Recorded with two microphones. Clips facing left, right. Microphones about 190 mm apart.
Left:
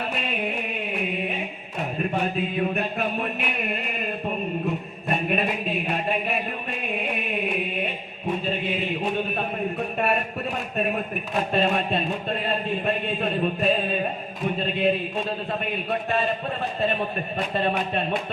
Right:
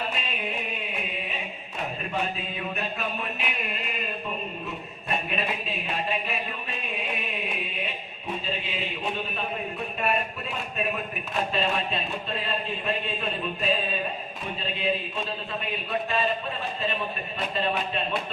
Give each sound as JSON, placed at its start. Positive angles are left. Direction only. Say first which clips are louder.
{"t": 0.1, "sound": "music", "louder": "left 5 dB", "side_deg": 60}
{"t": 2.3, "sound": "music", "louder": "left 8 dB", "side_deg": 55}
{"t": 5.0, "sound": "a sound", "louder": "left 5 dB", "side_deg": 55}
{"t": 8.4, "sound": "mantra", "louder": "left 6 dB", "side_deg": 55}
{"t": 11.5, "sound": "a sound", "louder": "left 7 dB", "side_deg": 55}
{"t": 15.9, "sound": "music", "louder": "left 1 dB", "side_deg": 55}